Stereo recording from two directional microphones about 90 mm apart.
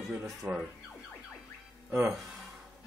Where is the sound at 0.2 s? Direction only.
10° right (ahead or behind).